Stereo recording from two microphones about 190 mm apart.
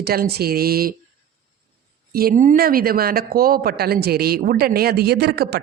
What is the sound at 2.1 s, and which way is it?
Speech, 45° right (ahead or behind).